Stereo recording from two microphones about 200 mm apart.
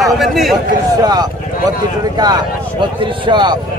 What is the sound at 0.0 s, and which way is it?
Speech, centre (ahead or behind).